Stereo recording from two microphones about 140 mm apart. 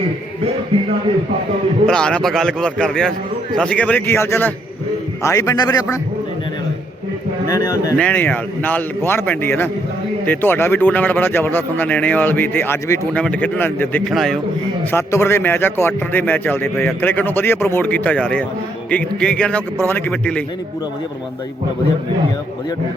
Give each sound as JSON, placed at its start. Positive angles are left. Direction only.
{"t": 0.7, "sound": "speech", "side_deg": -45}
{"t": 1.9, "sound": "a man's voice", "side_deg": 5}
{"t": 7.4, "sound": "a man's voice", "side_deg": 25}
{"t": 7.9, "sound": "a man's voice", "side_deg": 10}
{"t": 14.1, "sound": "speech", "side_deg": 0}
{"t": 14.9, "sound": "a man's voice", "side_deg": 15}